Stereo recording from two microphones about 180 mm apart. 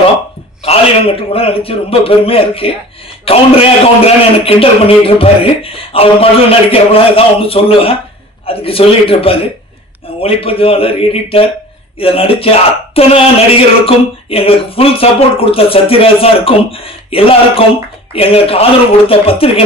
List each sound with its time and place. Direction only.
0.7 s speech: 30° left (ahead or behind)